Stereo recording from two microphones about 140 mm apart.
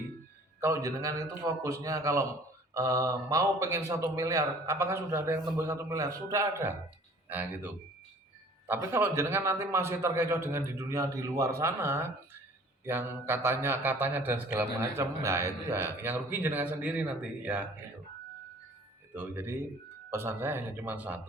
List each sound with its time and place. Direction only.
0.6 s a man's voice: 20° right (ahead or behind)
19.1 s a man's voice: 15° right (ahead or behind)